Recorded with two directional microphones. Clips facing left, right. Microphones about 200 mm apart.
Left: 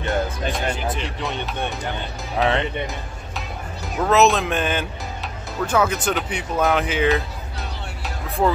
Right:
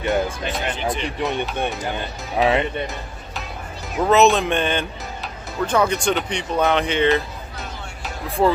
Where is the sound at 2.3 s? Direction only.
10° right (ahead or behind).